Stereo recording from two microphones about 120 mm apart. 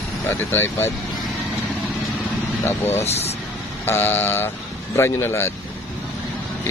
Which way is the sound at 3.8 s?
20° left (ahead or behind).